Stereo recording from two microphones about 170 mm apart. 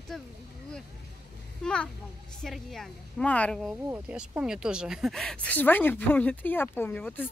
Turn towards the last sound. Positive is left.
turn(degrees=10)  # may be behind; listen again after turning